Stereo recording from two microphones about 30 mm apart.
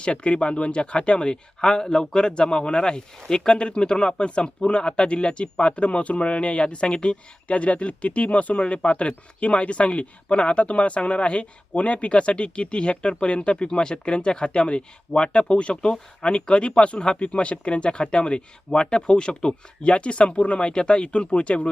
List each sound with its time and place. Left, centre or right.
0.0 s speech: left
3.2 s speech: centre
3.5 s speech: left
19.9 s speech: left